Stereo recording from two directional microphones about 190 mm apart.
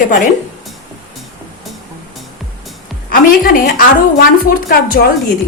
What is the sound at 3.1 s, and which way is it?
A woman's voice, 50° left (ahead or behind).